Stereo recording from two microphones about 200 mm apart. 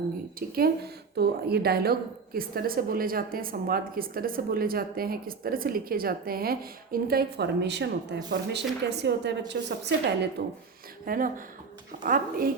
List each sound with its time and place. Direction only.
0.3 s a woman's voice: 50° right (ahead or behind)
11.0 s a woman's voice: 45° right (ahead or behind)